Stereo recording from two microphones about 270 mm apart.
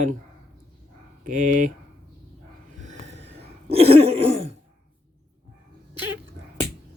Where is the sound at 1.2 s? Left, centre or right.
Right.